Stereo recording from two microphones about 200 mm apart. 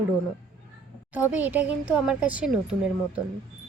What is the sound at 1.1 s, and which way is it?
Speech, 10° right (ahead or behind).